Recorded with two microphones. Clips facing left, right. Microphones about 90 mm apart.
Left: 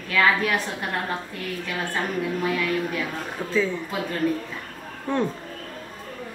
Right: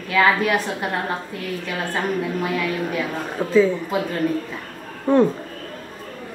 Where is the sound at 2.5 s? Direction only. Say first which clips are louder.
Right 2 dB; 10° right (ahead or behind).